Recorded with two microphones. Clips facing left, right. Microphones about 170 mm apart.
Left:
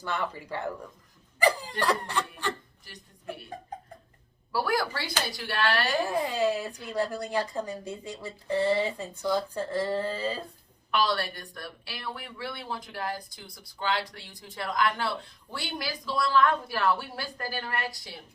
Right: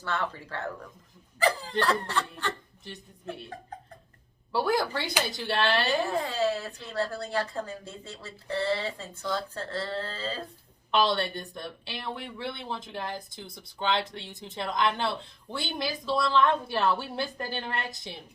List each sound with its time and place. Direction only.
0.0 s a woman's voice: 15° left (ahead or behind)
2.8 s speech: 25° right (ahead or behind)
4.5 s speech: 25° right (ahead or behind)
6.1 s a woman's voice: 15° left (ahead or behind)
10.9 s speech: 25° right (ahead or behind)